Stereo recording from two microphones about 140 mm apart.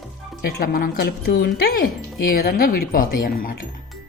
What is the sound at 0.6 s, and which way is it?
Speech, 90° left.